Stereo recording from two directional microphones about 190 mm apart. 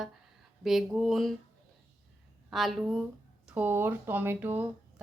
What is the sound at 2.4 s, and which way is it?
A woman's voice, centre (ahead or behind).